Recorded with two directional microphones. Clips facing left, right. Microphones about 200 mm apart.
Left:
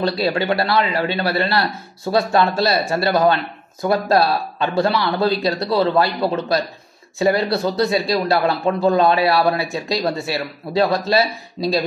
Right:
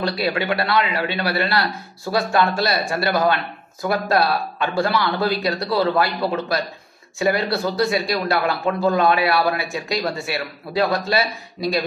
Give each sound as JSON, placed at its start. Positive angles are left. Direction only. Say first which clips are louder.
{"t": 0.0, "sound": "a man's voice", "louder": "left 3 dB", "side_deg": 25}